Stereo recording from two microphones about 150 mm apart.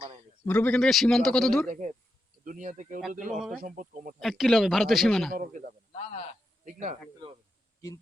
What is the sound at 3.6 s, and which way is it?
Speech, 60° right (ahead or behind).